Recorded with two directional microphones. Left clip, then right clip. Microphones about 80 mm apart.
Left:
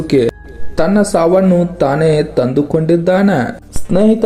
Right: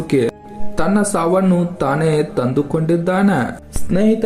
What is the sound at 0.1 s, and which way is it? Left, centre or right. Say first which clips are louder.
Speech: left 4 dB; left.